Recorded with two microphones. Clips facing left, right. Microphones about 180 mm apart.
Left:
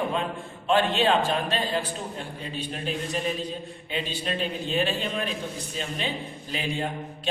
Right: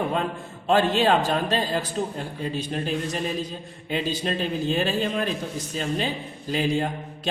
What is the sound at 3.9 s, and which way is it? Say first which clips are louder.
A man's voice: right 4 dB; 40° right (ahead or behind).